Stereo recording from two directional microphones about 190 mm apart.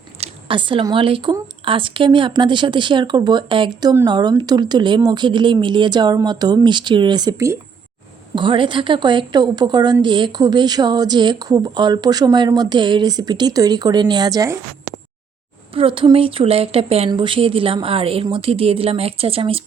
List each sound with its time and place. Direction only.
0.2 s speech: 25° right (ahead or behind)
8.4 s speech: 25° right (ahead or behind)
15.7 s speech: 30° right (ahead or behind)